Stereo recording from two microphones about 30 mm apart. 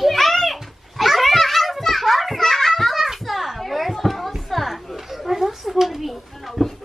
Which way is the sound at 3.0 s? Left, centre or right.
Centre.